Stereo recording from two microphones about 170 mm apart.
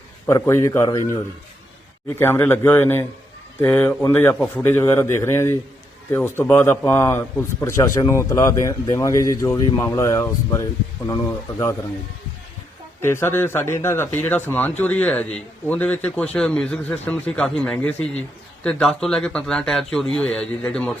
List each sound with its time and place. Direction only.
0.3 s speech: 15° left (ahead or behind)
13.0 s speech: 15° left (ahead or behind)